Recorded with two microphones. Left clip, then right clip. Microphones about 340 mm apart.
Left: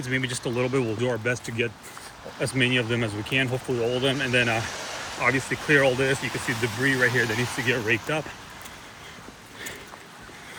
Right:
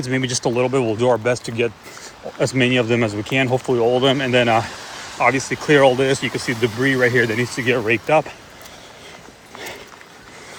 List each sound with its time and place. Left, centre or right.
0.1 s speech: centre
3.5 s speech: right
3.9 s speech: centre